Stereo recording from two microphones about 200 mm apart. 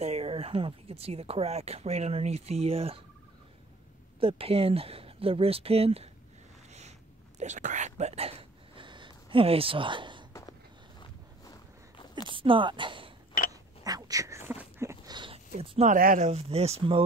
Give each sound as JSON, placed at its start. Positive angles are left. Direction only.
{"t": 0.0, "sound": "speech", "side_deg": -30}
{"t": 4.2, "sound": "speech", "side_deg": -30}
{"t": 7.3, "sound": "whispering", "side_deg": -35}
{"t": 12.3, "sound": "speech", "side_deg": -25}
{"t": 13.5, "sound": "a sound", "side_deg": -20}
{"t": 15.5, "sound": "speech", "side_deg": -30}
{"t": 15.9, "sound": "speech", "side_deg": -45}
{"t": 16.3, "sound": "speech", "side_deg": -30}